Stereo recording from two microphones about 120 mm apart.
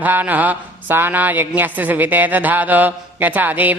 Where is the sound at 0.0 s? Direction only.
15° right (ahead or behind).